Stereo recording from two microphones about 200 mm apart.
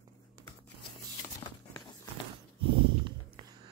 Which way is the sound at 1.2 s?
20° left (ahead or behind).